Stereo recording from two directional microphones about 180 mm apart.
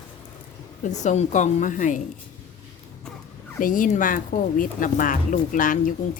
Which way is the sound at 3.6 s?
45° left (ahead or behind).